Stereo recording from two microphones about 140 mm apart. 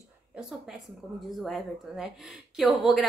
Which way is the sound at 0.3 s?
5° right (ahead or behind).